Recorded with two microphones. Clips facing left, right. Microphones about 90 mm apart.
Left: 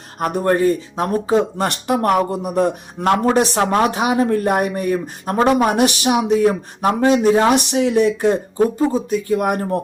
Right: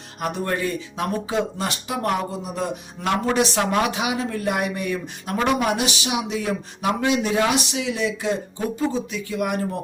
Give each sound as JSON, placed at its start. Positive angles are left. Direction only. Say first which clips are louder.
{"t": 0.2, "sound": "speech", "louder": "left 8 dB", "side_deg": 45}
{"t": 7.7, "sound": "speech", "louder": "left 9 dB", "side_deg": 50}